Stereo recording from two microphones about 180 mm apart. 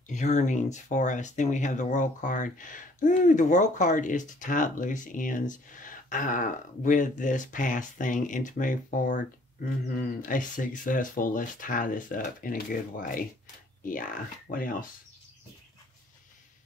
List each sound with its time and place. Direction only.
0.1 s speech: 40° left (ahead or behind)